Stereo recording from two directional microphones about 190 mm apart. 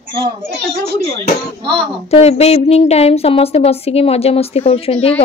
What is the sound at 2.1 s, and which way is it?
A woman's voice, 35° left (ahead or behind).